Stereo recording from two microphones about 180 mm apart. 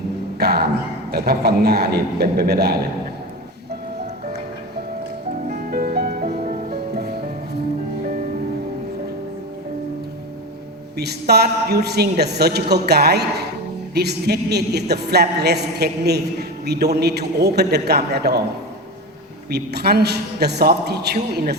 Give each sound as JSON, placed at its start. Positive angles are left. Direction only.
{"t": 0.3, "sound": "music", "side_deg": -65}
{"t": 1.1, "sound": "a woman's voice", "side_deg": -60}
{"t": 5.5, "sound": "music", "side_deg": -55}
{"t": 6.2, "sound": "music", "side_deg": -40}
{"t": 10.9, "sound": "a woman's voice", "side_deg": -65}
{"t": 19.5, "sound": "a woman's voice", "side_deg": -65}